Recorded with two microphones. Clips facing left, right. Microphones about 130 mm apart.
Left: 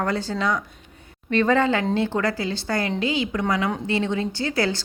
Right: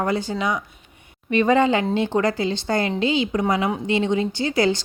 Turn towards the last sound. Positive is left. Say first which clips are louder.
# right 4 dB
turn(degrees=-20)  # may be behind; listen again after turning